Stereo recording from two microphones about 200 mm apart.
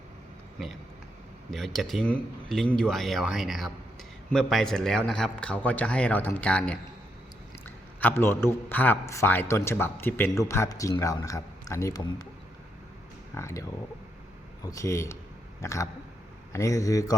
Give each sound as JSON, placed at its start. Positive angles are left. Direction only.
{"t": 1.5, "sound": "a man's voice", "side_deg": 0}
{"t": 13.3, "sound": "a man's voice", "side_deg": 15}